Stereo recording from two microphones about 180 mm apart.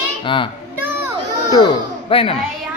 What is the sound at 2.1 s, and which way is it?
Speech, 30° left (ahead or behind).